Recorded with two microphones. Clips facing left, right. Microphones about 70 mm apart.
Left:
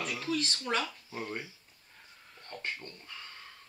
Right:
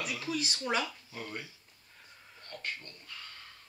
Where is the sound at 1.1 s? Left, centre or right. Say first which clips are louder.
Left 3 dB; left.